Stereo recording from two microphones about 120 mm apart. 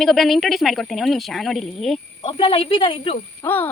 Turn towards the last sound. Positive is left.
turn(degrees=20)  # may be behind; listen again after turning